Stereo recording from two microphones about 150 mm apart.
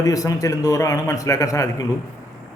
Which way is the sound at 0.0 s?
25° left (ahead or behind).